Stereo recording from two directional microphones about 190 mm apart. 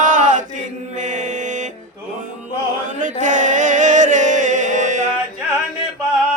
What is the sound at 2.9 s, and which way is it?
Music, 40° right (ahead or behind).